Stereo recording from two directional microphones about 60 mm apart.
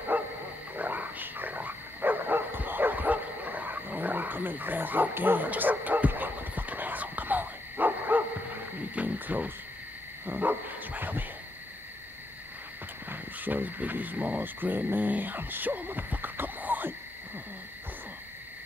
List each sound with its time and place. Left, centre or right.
0.1 s bow-wow: right
8.9 s a sound: right
10.2 s dog: right
13.1 s speech: right